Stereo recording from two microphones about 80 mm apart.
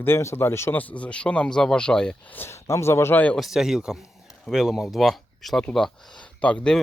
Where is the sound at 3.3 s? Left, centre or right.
Centre.